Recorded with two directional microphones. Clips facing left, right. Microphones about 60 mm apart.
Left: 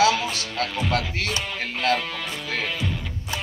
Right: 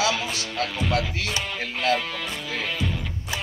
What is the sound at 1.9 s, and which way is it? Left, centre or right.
Speech, centre.